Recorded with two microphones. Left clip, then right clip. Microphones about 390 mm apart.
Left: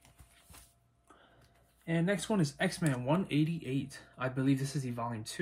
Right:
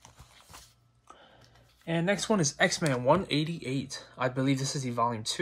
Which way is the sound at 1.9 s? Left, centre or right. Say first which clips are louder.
Right 5 dB; right.